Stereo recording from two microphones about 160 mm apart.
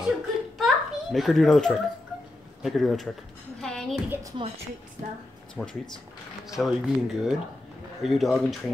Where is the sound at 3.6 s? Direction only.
5° left (ahead or behind).